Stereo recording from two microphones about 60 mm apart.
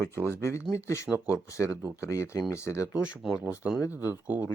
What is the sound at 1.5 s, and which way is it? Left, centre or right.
Speech, left.